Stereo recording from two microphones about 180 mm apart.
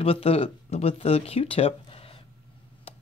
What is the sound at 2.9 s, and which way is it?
Tick-tock, 35° left (ahead or behind).